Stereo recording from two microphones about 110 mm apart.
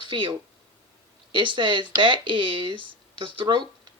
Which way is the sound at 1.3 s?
45° right (ahead or behind).